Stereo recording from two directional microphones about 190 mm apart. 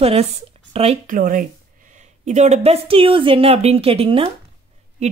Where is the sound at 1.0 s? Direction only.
45° right (ahead or behind).